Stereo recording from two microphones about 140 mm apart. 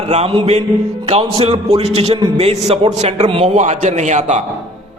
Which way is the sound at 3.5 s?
55° right (ahead or behind).